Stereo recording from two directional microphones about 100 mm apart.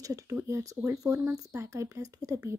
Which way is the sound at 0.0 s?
35° right (ahead or behind).